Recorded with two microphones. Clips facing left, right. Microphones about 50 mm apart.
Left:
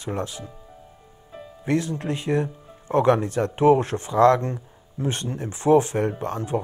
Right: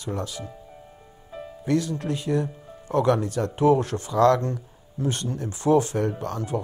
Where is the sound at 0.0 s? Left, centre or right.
Left.